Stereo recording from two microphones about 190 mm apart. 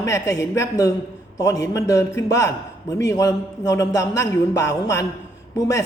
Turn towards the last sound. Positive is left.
turn(degrees=15)  # may be behind; listen again after turning